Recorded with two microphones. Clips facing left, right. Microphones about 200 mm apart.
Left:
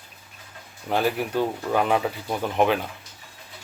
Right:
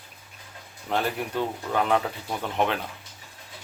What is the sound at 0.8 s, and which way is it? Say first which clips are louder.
Speech: left 4 dB; 10° left (ahead or behind).